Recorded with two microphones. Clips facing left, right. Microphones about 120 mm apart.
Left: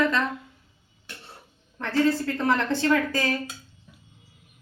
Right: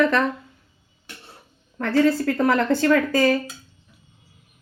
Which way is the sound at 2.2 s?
80° right.